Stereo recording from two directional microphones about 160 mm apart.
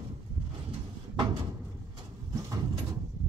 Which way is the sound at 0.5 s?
30° right (ahead or behind).